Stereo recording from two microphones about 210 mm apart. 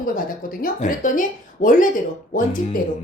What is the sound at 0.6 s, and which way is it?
A woman's voice, 40° left (ahead or behind).